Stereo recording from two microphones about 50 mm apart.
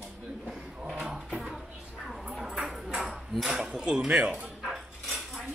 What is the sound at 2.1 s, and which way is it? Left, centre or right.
Ping, centre.